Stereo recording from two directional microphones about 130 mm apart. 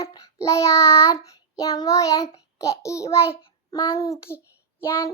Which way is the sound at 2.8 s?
25° left (ahead or behind).